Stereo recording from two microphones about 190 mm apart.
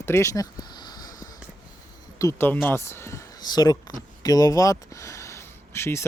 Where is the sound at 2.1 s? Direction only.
15° left (ahead or behind).